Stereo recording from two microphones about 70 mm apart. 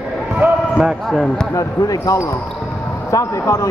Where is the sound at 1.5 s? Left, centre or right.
Left.